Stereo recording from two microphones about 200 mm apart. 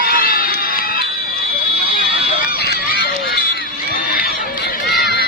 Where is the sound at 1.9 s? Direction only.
45° left (ahead or behind).